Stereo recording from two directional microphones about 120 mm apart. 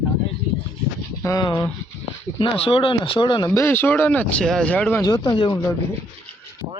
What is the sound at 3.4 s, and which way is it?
Speech, 25° left (ahead or behind).